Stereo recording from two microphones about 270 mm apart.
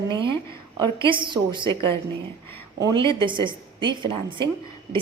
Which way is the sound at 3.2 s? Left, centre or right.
Centre.